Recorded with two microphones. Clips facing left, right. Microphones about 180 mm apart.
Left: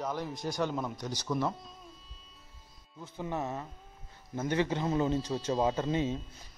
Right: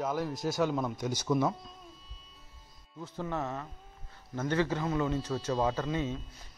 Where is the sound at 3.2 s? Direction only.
15° left (ahead or behind).